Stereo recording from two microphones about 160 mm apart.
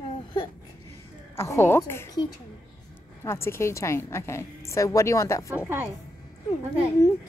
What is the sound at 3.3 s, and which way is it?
A woman's voice, 15° left (ahead or behind).